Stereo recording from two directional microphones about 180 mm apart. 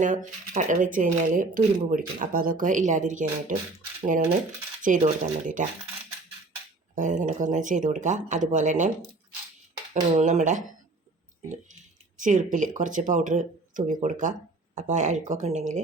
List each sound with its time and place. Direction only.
0.0 s speech: 45° right (ahead or behind)
4.8 s speech: 45° right (ahead or behind)
6.9 s speech: 45° right (ahead or behind)
9.9 s speech: 40° right (ahead or behind)
12.1 s speech: 45° right (ahead or behind)